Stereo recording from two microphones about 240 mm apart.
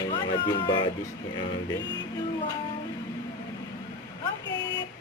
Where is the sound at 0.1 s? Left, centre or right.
Centre.